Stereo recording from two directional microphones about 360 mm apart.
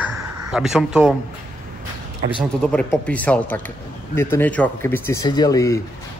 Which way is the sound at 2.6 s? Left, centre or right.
Centre.